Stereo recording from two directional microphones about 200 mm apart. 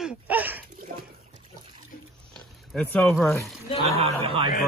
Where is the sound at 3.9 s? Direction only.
30° right (ahead or behind).